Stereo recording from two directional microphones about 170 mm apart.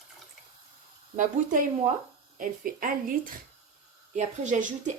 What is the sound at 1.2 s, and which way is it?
A woman's voice, 50° right (ahead or behind).